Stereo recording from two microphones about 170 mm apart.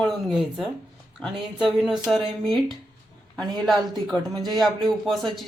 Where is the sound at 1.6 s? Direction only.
Centre (ahead or behind).